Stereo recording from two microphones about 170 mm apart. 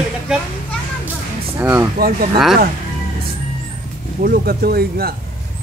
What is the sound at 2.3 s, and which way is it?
Speech, centre (ahead or behind).